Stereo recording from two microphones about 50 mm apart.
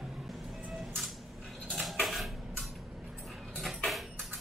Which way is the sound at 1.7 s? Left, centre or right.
Centre.